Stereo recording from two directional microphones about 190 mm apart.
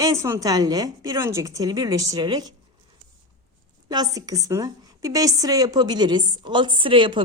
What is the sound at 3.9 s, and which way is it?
A woman's voice, 20° right (ahead or behind).